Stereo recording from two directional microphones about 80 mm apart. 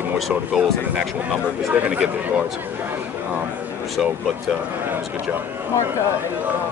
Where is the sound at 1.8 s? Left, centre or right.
Centre.